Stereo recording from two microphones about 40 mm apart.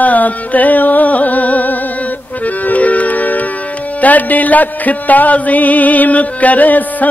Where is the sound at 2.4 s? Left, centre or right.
Left.